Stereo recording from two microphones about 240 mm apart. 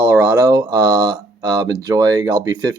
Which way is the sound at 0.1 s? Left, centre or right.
Centre.